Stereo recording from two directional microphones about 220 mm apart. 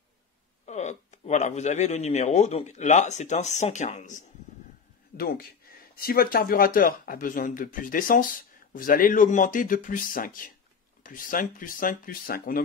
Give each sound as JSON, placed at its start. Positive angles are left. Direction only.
{"t": 0.7, "sound": "speech", "side_deg": 30}